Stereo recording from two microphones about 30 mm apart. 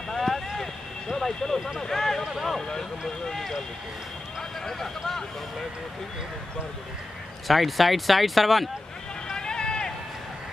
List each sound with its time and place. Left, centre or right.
0.1 s a sound: centre
1.8 s speech: centre
3.3 s speech: centre
7.4 s speech: centre
9.3 s run: left